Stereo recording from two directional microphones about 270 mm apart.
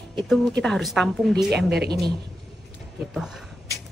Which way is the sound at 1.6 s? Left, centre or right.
Right.